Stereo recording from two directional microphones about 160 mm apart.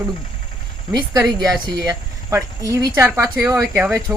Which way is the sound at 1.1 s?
20° right (ahead or behind).